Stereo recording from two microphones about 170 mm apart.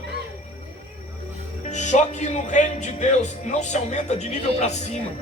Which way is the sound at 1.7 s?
45° left (ahead or behind).